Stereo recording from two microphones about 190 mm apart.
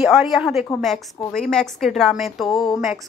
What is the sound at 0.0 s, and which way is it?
Speech, centre (ahead or behind).